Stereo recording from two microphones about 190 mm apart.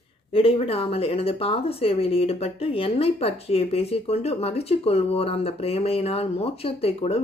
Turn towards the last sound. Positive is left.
turn(degrees=30)  # may be behind; listen again after turning